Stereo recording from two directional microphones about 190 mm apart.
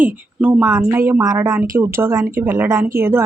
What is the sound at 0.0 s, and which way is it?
Speech, 5° right (ahead or behind).